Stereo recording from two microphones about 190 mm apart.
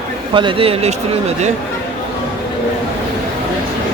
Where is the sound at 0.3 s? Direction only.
30° right (ahead or behind).